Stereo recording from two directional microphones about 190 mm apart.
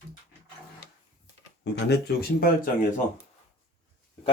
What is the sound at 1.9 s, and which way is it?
Speech, 55° left (ahead or behind).